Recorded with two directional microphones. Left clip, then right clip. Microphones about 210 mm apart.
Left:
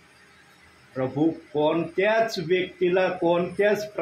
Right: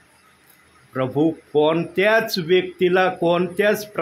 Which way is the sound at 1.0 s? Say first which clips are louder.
Right 4 dB; 40° right (ahead or behind).